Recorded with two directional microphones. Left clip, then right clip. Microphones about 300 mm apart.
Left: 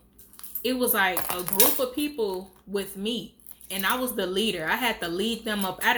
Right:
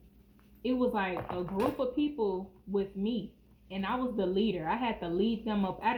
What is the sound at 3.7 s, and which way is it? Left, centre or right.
Speech, centre.